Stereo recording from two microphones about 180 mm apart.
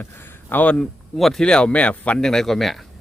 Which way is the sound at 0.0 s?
10° left (ahead or behind).